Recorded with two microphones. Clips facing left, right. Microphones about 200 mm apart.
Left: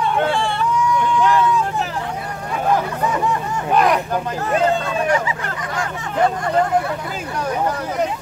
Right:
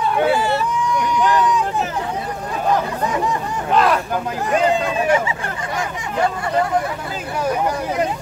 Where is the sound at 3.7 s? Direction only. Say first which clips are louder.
Even; 15° left (ahead or behind).